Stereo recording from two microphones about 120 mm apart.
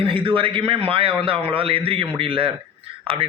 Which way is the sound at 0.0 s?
45° right (ahead or behind).